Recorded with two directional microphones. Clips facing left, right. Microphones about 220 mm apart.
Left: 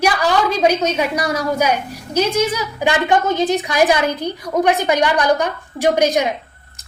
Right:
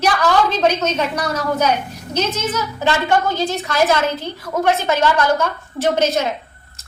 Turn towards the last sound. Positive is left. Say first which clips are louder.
# left 2 dB
turn(degrees=15)  # may be behind; listen again after turning